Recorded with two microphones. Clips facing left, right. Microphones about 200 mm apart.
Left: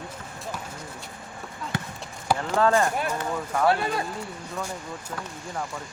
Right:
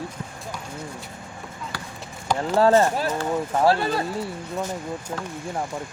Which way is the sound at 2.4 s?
30° right (ahead or behind).